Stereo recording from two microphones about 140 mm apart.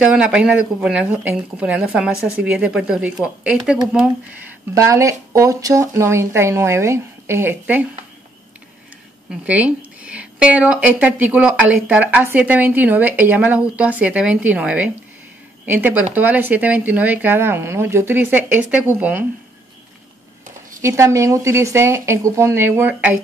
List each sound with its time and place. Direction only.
0.0 s a woman's voice: 5° right (ahead or behind)
4.7 s speech: 20° right (ahead or behind)
9.3 s a woman's voice: 10° right (ahead or behind)
20.8 s speech: 20° right (ahead or behind)